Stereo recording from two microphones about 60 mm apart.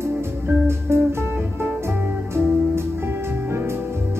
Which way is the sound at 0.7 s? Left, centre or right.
Right.